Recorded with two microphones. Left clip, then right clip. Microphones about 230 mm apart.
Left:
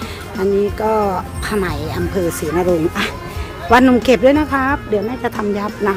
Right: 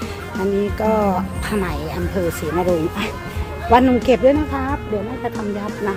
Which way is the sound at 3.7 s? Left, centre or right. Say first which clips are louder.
Left 3 dB; left.